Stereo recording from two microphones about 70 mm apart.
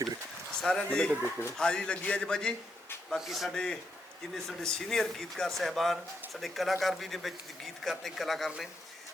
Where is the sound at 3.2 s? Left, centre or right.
Centre.